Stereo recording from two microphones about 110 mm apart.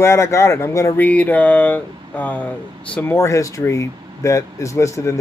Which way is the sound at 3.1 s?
25° left (ahead or behind).